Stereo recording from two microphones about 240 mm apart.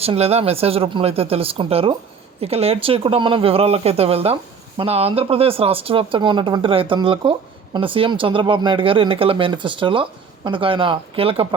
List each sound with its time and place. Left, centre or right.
0.0 s speech: right